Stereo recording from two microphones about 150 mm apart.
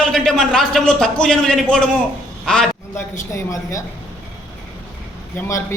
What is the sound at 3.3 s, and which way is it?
Speech, 20° left (ahead or behind).